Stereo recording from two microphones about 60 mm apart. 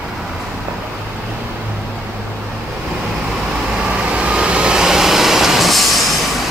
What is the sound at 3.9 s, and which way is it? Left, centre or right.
Vehicle, centre.